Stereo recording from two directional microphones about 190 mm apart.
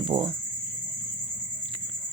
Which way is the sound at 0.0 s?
25° right (ahead or behind).